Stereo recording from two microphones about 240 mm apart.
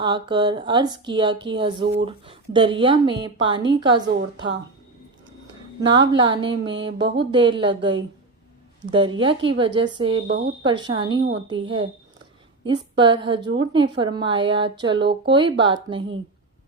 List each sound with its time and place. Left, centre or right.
0.0 s a woman's voice: centre
5.8 s a woman's voice: centre